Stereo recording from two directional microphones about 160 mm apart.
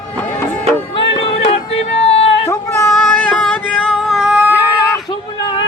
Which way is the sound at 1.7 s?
40° left (ahead or behind).